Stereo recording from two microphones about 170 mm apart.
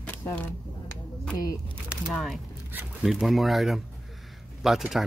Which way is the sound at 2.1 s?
Centre (ahead or behind).